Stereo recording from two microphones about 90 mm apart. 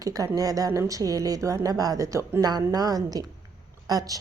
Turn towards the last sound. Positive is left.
turn(degrees=-45)  # may be behind; listen again after turning